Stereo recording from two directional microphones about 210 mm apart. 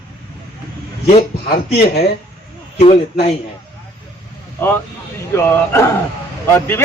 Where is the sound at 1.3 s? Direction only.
50° left (ahead or behind).